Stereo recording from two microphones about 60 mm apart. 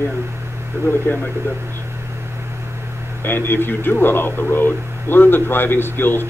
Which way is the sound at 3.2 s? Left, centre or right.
Left.